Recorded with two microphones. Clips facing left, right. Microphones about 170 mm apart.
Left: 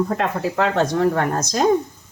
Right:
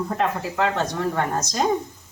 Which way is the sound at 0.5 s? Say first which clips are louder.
Left 4 dB; 55° left (ahead or behind).